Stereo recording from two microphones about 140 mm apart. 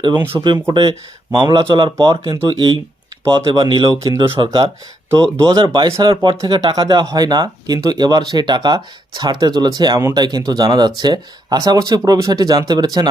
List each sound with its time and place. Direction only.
0.0 s speech: 35° right (ahead or behind)